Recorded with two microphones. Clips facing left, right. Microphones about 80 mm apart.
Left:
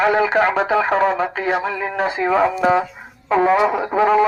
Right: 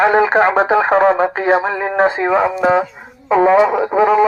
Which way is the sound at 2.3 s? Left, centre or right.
Centre.